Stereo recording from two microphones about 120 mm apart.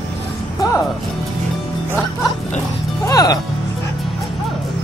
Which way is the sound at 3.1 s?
30° left (ahead or behind).